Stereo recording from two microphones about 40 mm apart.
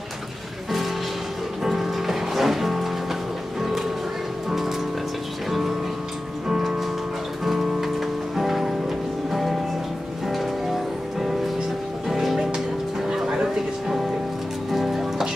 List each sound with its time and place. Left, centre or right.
1.6 s music: centre
4.5 s music: centre
13.1 s music: centre